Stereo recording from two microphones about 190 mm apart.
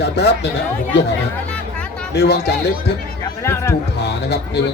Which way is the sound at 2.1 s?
60° left (ahead or behind).